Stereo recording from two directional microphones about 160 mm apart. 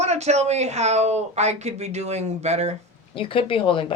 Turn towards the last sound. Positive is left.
turn(degrees=35)  # may be behind; listen again after turning